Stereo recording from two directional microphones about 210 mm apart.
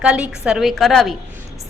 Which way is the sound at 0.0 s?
5° right (ahead or behind).